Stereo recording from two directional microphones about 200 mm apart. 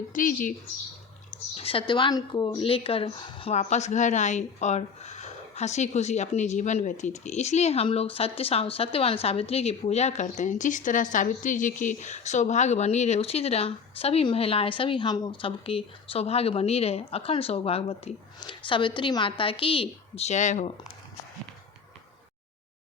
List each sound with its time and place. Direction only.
0.1 s speech: 40° left (ahead or behind)
1.5 s speech: 30° left (ahead or behind)